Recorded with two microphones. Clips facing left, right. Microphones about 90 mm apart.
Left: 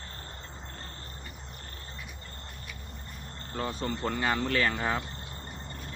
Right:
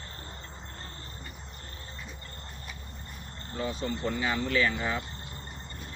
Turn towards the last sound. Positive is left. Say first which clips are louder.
# even
turn(degrees=45)  # may be behind; listen again after turning